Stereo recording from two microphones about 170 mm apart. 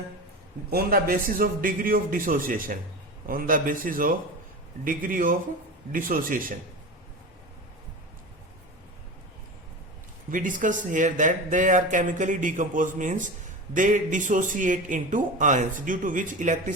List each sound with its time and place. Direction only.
0.7 s a man's voice: 65° right (ahead or behind)
10.3 s speech: 50° right (ahead or behind)